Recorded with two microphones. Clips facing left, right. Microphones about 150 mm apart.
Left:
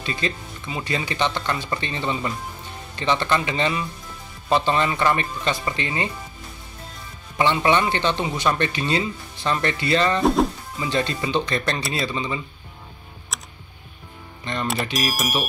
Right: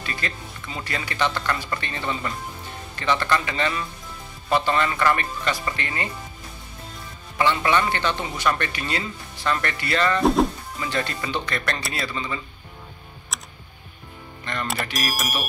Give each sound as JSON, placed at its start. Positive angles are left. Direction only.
{"t": 0.0, "sound": "speech", "side_deg": 25}
{"t": 7.3, "sound": "speech", "side_deg": 25}
{"t": 10.2, "sound": "speech", "side_deg": 0}
{"t": 10.8, "sound": "speech", "side_deg": 20}
{"t": 13.3, "sound": "computer keyboard", "side_deg": 0}
{"t": 14.4, "sound": "speech", "side_deg": 20}
{"t": 15.0, "sound": "speech", "side_deg": 0}